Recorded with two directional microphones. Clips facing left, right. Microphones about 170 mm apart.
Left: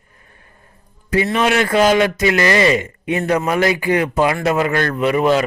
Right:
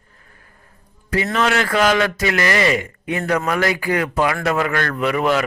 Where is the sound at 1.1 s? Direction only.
20° left (ahead or behind).